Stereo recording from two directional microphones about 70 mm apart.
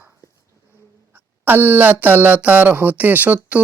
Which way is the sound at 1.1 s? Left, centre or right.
Right.